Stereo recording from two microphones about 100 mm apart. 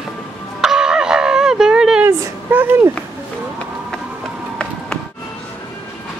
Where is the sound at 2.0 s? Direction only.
20° right (ahead or behind).